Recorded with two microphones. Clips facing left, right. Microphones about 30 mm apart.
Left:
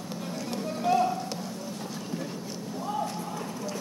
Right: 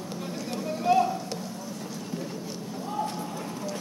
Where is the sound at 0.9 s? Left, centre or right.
Right.